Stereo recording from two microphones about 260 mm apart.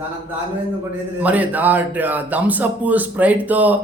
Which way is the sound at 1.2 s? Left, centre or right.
Centre.